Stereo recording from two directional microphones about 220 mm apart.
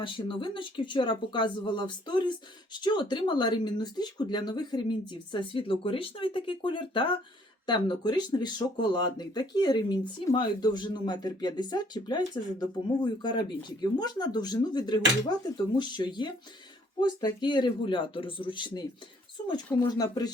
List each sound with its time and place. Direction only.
0.0 s speech: 20° left (ahead or behind)
19.9 s speech: 15° left (ahead or behind)